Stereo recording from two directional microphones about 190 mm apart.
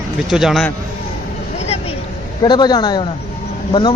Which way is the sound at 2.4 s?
20° left (ahead or behind).